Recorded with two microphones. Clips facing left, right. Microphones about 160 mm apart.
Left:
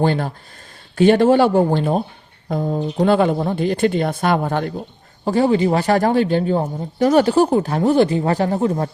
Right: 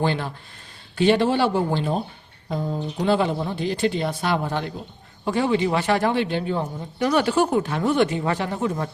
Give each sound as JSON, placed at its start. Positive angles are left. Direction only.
{"t": 0.0, "sound": "speech", "side_deg": 45}
{"t": 5.2, "sound": "speech", "side_deg": 35}